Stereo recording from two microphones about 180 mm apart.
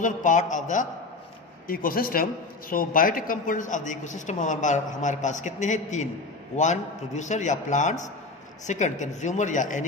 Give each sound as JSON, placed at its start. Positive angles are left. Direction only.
{"t": 0.0, "sound": "a man's voice", "side_deg": 45}